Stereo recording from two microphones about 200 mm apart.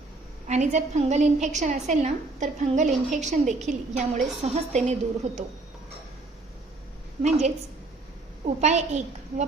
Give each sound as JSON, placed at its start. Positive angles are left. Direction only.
{"t": 0.4, "sound": "a woman's voice", "side_deg": -35}
{"t": 7.2, "sound": "a woman's voice", "side_deg": -35}